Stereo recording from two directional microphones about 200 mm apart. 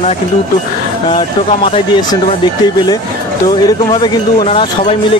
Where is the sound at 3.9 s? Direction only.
25° left (ahead or behind).